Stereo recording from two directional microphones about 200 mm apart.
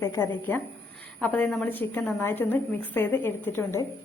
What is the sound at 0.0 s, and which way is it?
A woman's voice, 15° left (ahead or behind).